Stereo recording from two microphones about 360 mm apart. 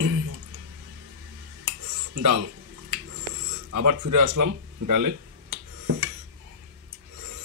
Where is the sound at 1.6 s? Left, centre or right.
Right.